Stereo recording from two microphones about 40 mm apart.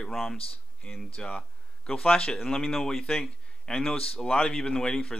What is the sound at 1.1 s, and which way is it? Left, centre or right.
Speech, left.